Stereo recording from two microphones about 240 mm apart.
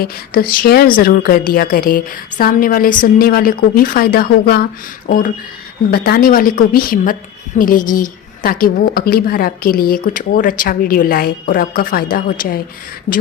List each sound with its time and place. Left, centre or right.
0.0 s a woman's voice: left